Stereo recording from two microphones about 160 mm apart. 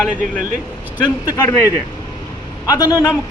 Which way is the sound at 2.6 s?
20° left (ahead or behind).